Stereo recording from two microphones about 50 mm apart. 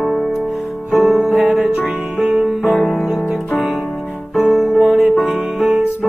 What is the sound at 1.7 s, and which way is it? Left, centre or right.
Music, centre.